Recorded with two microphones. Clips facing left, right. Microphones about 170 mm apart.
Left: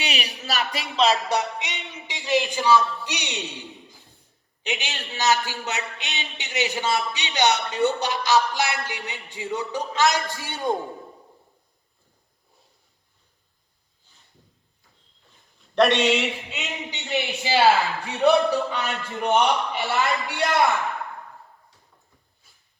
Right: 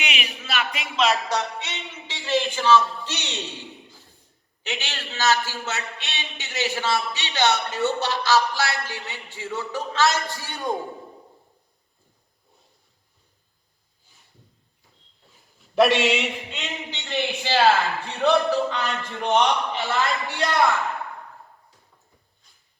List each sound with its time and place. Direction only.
0.0 s speech: 35° left (ahead or behind)
1.1 s a man's voice: 20° left (ahead or behind)
15.7 s a sound: centre (ahead or behind)
16.9 s a man's voice: 15° left (ahead or behind)
18.7 s a man's voice: 5° left (ahead or behind)
22.4 s dog: 5° left (ahead or behind)